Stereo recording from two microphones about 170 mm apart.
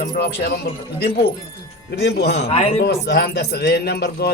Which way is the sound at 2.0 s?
70° left (ahead or behind).